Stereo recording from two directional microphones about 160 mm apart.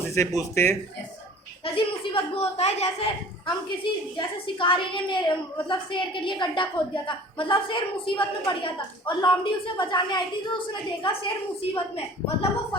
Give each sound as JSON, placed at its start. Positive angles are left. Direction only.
{"t": 0.0, "sound": "a sound", "side_deg": 15}
{"t": 0.3, "sound": "speech", "side_deg": 15}
{"t": 1.6, "sound": "a woman's voice", "side_deg": 35}
{"t": 4.2, "sound": "a woman's voice", "side_deg": 30}